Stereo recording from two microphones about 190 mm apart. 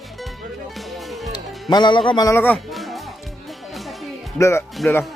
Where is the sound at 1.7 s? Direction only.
25° left (ahead or behind).